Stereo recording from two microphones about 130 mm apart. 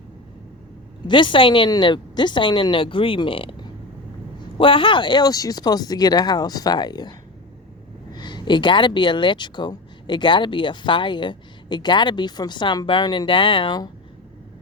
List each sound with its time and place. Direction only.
1.0 s speech: 40° left (ahead or behind)
8.1 s speech: 35° left (ahead or behind)